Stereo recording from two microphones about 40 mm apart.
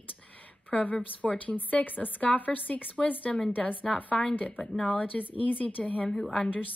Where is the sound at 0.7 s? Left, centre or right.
Left.